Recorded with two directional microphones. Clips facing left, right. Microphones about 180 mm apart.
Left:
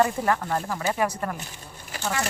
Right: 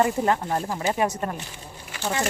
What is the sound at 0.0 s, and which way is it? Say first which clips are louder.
A child's voice: right 1 dB; 25° right (ahead or behind).